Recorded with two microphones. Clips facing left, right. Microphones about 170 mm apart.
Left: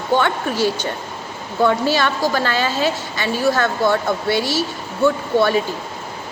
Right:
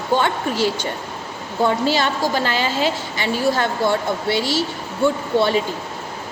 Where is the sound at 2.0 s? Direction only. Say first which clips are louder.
Left 1 dB; 20° right (ahead or behind).